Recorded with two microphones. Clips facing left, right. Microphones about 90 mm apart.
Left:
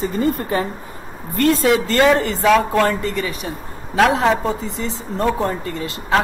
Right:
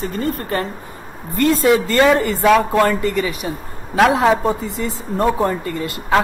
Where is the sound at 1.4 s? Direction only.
Centre (ahead or behind).